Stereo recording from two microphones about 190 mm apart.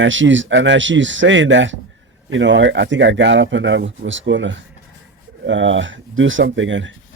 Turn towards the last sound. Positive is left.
turn(degrees=-80)